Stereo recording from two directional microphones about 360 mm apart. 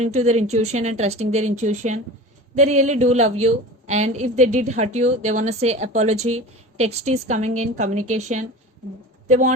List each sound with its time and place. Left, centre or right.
0.0 s a woman's voice: centre